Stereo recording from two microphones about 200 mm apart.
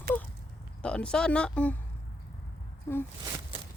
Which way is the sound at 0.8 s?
5° left (ahead or behind).